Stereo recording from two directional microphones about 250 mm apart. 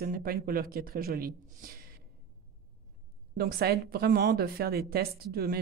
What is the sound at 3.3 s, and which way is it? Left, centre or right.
Speech, right.